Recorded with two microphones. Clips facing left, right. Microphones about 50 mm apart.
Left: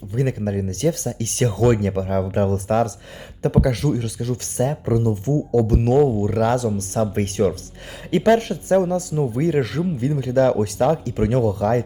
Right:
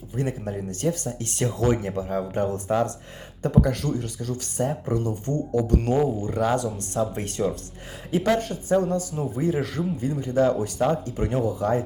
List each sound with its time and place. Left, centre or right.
0.2 s speech: left
5.5 s speech: left
6.2 s speech: left
8.1 s a woman's voice: left